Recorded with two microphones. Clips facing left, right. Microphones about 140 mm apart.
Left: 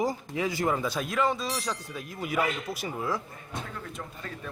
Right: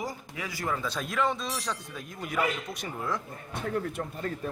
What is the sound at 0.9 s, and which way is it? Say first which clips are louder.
Speech: left 2 dB; 5° left (ahead or behind).